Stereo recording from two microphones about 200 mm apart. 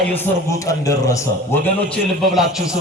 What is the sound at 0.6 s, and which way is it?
Speech, 15° left (ahead or behind).